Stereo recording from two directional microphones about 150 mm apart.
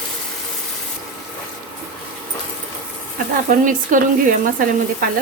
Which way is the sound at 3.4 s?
60° right (ahead or behind).